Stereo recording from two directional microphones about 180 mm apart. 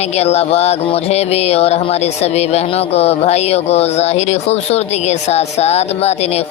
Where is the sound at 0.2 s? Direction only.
35° left (ahead or behind).